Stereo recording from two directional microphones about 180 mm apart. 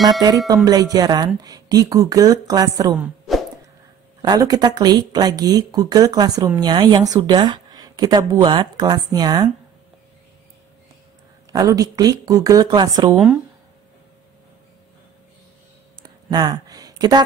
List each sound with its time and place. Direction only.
0.7 s speech: 20° right (ahead or behind)
3.0 s a sound: centre (ahead or behind)
4.2 s speech: 20° right (ahead or behind)
11.5 s speech: 20° right (ahead or behind)
13.1 s speech: 5° right (ahead or behind)
16.0 s a sound: 25° right (ahead or behind)